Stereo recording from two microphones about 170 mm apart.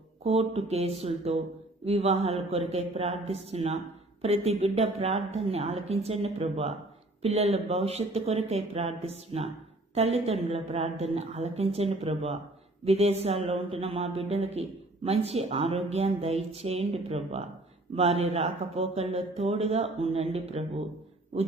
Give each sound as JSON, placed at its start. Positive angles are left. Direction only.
{"t": 0.3, "sound": "speech", "side_deg": -35}